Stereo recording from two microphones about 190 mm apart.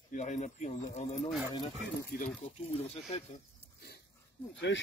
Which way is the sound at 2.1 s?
50° left (ahead or behind).